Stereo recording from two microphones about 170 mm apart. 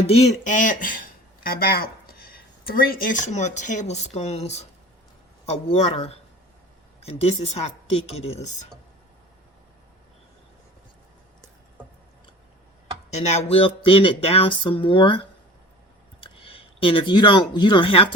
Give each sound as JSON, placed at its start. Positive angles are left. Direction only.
{"t": 0.1, "sound": "speech", "side_deg": 40}
{"t": 13.1, "sound": "speech", "side_deg": 40}